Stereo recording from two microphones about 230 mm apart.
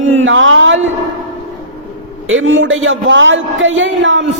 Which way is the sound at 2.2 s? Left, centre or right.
Right.